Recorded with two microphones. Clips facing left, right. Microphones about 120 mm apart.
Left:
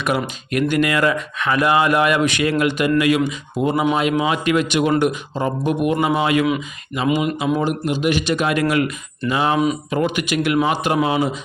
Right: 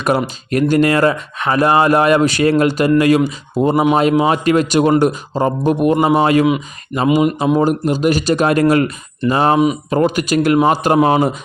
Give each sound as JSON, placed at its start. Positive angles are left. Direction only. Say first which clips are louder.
{"t": 0.5, "sound": "speech", "louder": "right 5 dB", "side_deg": -35}